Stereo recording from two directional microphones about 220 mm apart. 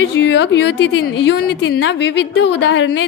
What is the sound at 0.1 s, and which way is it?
A woman's voice, 50° left (ahead or behind).